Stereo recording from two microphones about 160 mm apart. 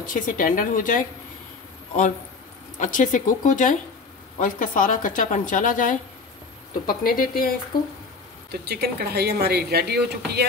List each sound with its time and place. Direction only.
0.0 s a woman's voice: 60° left (ahead or behind)
2.8 s a woman's voice: 55° left (ahead or behind)
8.5 s speech: 85° right